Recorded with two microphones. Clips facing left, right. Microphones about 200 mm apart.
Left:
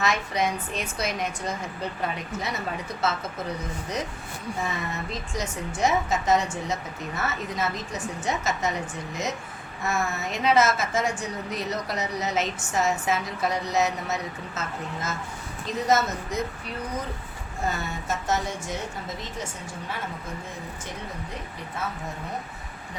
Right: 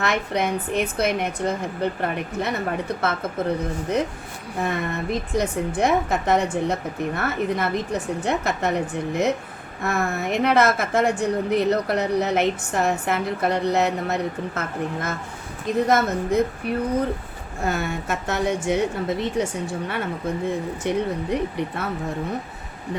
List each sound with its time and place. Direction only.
0.0 s a woman's voice: 60° right (ahead or behind)
20.9 s a woman's voice: 65° right (ahead or behind)